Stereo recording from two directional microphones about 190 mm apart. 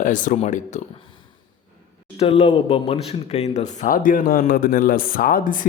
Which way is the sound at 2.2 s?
30° left (ahead or behind).